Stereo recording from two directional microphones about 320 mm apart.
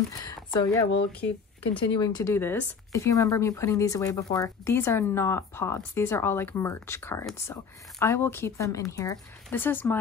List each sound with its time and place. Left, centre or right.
0.2 s speech: centre
1.2 s speech: left
2.0 s speech: centre